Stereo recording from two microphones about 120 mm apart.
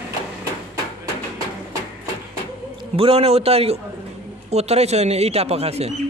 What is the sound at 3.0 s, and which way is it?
Speech, 55° right (ahead or behind).